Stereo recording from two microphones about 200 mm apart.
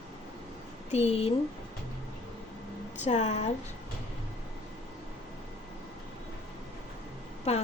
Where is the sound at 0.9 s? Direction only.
35° left (ahead or behind).